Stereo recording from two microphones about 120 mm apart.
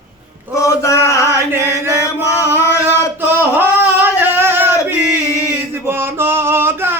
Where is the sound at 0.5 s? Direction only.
25° left (ahead or behind).